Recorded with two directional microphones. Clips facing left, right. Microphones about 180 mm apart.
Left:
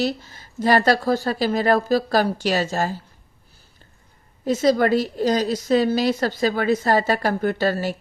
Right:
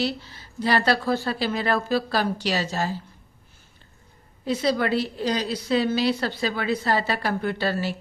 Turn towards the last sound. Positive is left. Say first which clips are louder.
# left 4 dB
turn(degrees=45)  # may be behind; listen again after turning